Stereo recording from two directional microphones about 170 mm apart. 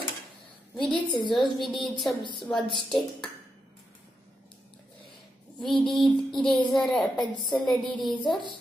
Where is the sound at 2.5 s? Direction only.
Centre (ahead or behind).